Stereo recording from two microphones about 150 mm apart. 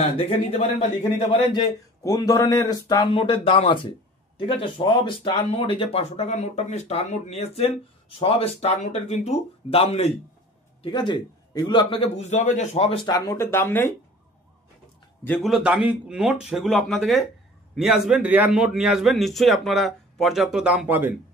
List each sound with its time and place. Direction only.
0.0 s speech: 40° left (ahead or behind)
2.0 s speech: 25° left (ahead or behind); by 10.1 s 45° left (ahead or behind)
10.8 s a man's voice: 30° left (ahead or behind)
12.3 s speech: 50° left (ahead or behind)
13.0 s speech: 25° left (ahead or behind)
15.4 s a man's voice: 5° right (ahead or behind)